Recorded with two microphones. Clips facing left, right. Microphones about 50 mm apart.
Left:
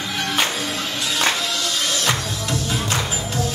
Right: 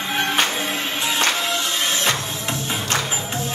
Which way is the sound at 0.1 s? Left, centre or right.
Right.